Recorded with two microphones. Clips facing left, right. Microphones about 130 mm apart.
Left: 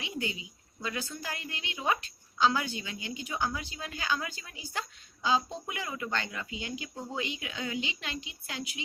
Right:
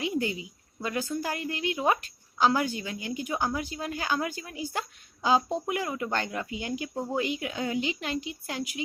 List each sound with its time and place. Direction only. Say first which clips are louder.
0.0 s a woman's voice: right 7 dB; 50° right (ahead or behind)